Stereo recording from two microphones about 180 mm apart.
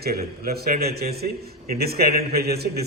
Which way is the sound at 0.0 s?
60° right (ahead or behind).